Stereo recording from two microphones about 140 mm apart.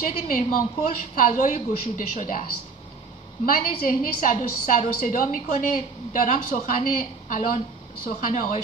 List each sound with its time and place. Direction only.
0.0 s a woman's voice: 75° left (ahead or behind)
3.4 s a woman's voice: 85° left; by 8.5 s 70° left (ahead or behind)